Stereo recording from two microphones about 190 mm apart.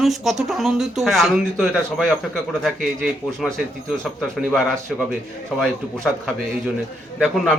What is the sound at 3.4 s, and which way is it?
Speech, centre (ahead or behind).